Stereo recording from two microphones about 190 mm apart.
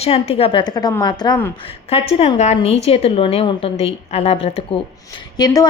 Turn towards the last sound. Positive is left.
turn(degrees=20)  # may be behind; listen again after turning